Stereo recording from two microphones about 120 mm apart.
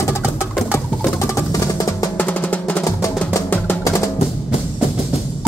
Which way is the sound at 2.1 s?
15° left (ahead or behind).